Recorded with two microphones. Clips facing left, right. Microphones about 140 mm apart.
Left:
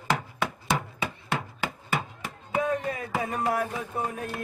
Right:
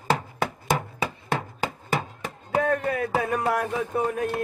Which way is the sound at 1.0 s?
40° right (ahead or behind).